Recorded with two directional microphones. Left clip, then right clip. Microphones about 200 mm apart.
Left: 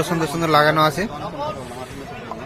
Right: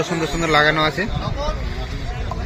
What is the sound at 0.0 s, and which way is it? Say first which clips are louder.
Speech: even; 10° left (ahead or behind).